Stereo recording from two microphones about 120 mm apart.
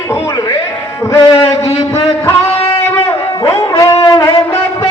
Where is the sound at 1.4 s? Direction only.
60° left (ahead or behind).